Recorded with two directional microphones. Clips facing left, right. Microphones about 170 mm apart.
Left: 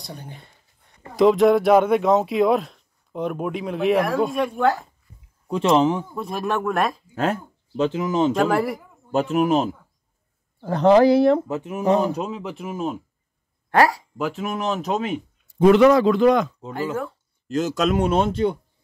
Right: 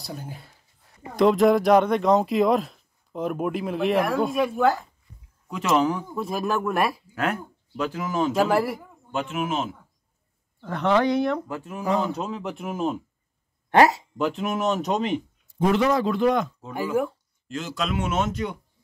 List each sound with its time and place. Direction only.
0.0 s speech: centre (ahead or behind)
5.5 s speech: 30° left (ahead or behind)
6.1 s speech: centre (ahead or behind)
7.2 s speech: 25° left (ahead or behind)
8.3 s speech: 5° right (ahead or behind)
9.1 s a man's voice: 40° left (ahead or behind); by 12.3 s 15° left (ahead or behind)
12.3 s speech: 5° left (ahead or behind)
13.7 s speech: 20° right (ahead or behind)
14.1 s speech: centre (ahead or behind)
15.6 s speech: 80° left
16.7 s speech: 15° right (ahead or behind)
17.5 s speech: 40° left (ahead or behind)